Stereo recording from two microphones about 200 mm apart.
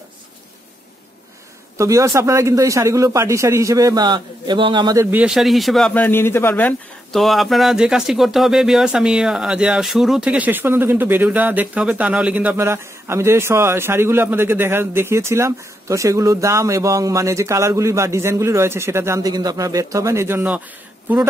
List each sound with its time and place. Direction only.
1.8 s speech: 15° right (ahead or behind)
5.1 s speech: 5° right (ahead or behind)